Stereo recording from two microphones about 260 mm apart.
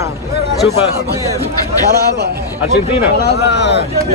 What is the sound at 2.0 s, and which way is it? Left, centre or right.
Speech, right.